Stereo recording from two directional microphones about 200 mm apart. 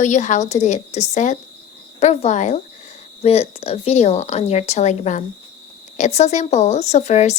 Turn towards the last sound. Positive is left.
turn(degrees=35)  # may be behind; listen again after turning